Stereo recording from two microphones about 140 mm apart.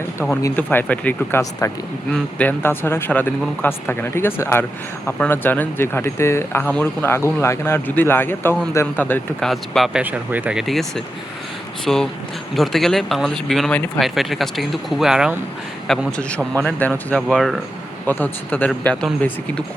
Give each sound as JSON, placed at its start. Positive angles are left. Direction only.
{"t": 0.4, "sound": "speech", "side_deg": 15}
{"t": 9.4, "sound": "speech", "side_deg": 0}
{"t": 10.0, "sound": "speech", "side_deg": -10}
{"t": 14.0, "sound": "speech", "side_deg": 0}
{"t": 18.0, "sound": "speech", "side_deg": 10}